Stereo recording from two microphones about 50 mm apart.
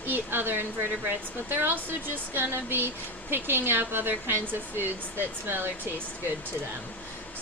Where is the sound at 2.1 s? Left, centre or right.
Right.